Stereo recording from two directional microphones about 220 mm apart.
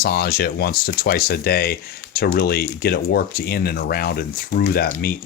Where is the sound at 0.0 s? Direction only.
45° left (ahead or behind).